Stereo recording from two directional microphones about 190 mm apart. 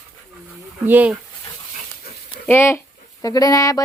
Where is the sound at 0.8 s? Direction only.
10° right (ahead or behind).